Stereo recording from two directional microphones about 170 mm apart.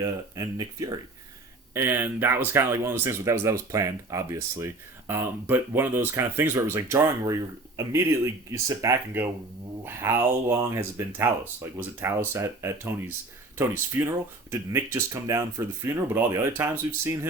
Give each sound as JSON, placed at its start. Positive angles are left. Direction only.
{"t": 0.0, "sound": "speech", "side_deg": -20}